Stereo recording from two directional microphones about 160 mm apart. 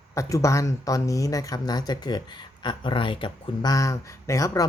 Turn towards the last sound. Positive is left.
turn(degrees=20)  # may be behind; listen again after turning